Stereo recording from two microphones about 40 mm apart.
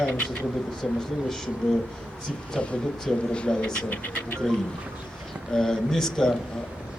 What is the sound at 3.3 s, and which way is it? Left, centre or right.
Speech, left.